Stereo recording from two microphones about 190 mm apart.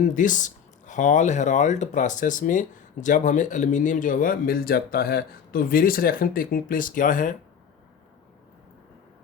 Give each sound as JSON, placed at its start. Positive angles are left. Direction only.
{"t": 0.0, "sound": "speech", "side_deg": 45}